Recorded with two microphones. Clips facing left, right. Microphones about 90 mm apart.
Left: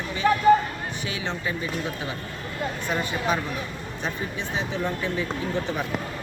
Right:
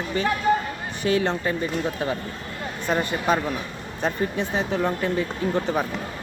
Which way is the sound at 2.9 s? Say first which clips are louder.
Right 5 dB; 45° right (ahead or behind).